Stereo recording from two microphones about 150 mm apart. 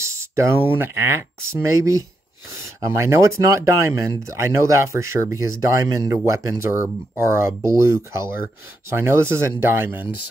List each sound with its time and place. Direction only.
0.0 s speech: 20° right (ahead or behind)